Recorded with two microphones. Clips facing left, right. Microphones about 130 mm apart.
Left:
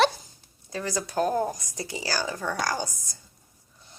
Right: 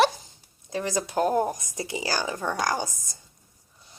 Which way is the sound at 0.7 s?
20° right (ahead or behind).